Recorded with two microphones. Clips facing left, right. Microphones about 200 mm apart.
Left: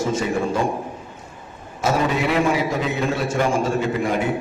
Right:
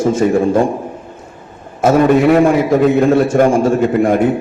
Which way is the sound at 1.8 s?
55° right (ahead or behind).